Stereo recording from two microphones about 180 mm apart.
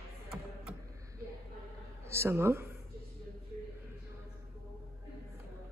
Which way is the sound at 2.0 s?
15° right (ahead or behind).